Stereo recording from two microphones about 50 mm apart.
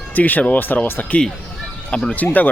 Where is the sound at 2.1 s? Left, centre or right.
Left.